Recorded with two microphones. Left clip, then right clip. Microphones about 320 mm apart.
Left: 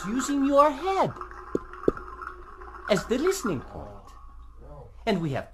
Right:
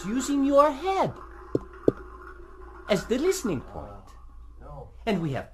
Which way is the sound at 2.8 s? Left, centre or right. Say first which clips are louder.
Even; centre.